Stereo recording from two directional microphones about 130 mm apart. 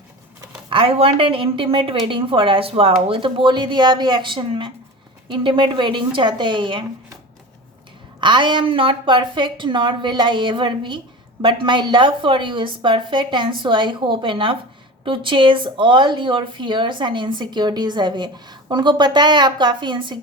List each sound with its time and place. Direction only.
0.7 s a woman's voice: 45° right (ahead or behind)
8.2 s speech: 35° right (ahead or behind)